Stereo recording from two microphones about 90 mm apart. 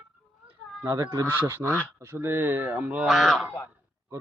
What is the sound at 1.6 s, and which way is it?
Speech, 20° left (ahead or behind).